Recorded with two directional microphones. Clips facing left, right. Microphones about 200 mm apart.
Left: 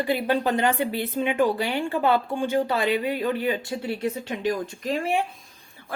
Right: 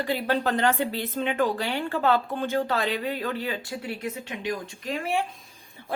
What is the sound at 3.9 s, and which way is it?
Speech, 30° left (ahead or behind).